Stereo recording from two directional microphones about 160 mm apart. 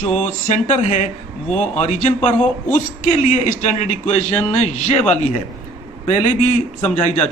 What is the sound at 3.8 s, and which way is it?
A man's voice, 45° left (ahead or behind).